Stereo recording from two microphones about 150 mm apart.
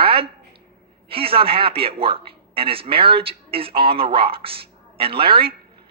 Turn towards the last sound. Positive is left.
turn(degrees=-35)  # may be behind; listen again after turning